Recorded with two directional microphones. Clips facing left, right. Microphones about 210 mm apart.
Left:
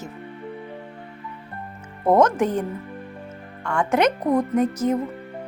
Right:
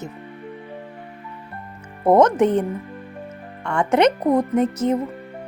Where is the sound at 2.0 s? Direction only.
20° right (ahead or behind).